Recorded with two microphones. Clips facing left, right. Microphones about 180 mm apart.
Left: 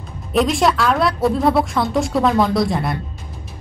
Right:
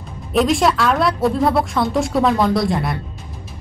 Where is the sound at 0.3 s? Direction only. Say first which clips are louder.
Right 1 dB; centre (ahead or behind).